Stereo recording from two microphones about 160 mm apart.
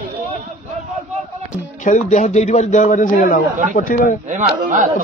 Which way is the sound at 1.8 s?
50° left (ahead or behind).